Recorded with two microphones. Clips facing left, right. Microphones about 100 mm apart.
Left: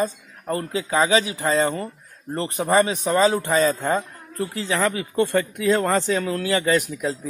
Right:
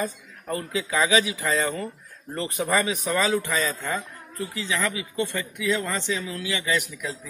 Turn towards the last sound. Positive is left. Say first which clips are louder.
# left 6 dB
turn(degrees=40)  # may be behind; listen again after turning